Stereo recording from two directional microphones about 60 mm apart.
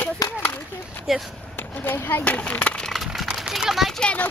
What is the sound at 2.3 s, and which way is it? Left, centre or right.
Speech, left.